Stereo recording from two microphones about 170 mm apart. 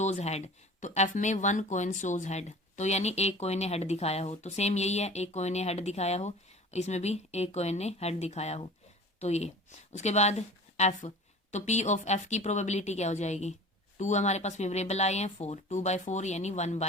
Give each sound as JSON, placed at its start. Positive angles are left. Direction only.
{"t": 0.0, "sound": "a woman's voice", "side_deg": 40}